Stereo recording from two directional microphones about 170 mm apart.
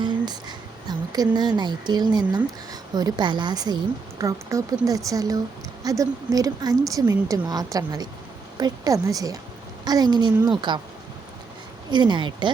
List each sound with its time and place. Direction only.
0.0 s a sound: 25° right (ahead or behind)
2.9 s a woman's voice: 25° right (ahead or behind)
11.9 s a woman's voice: 25° right (ahead or behind)